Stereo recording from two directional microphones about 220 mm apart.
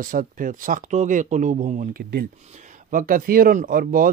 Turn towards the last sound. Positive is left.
turn(degrees=-40)  # may be behind; listen again after turning